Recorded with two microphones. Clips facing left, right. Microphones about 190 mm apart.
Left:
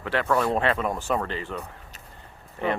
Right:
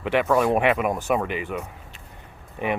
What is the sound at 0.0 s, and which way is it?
Speech, 15° right (ahead or behind).